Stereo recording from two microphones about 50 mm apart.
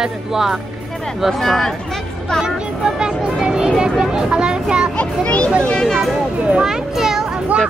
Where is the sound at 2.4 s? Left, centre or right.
Centre.